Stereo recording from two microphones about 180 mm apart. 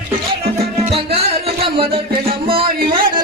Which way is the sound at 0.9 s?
35° right (ahead or behind).